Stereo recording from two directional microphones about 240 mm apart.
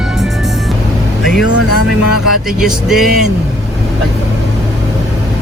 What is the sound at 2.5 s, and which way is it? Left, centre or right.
Speech, centre.